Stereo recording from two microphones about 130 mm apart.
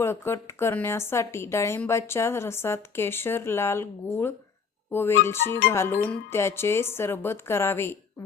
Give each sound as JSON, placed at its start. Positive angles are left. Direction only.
{"t": 0.0, "sound": "speech", "side_deg": 20}